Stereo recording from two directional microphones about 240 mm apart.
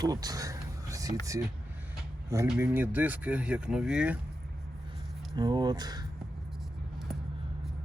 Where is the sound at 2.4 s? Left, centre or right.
Centre.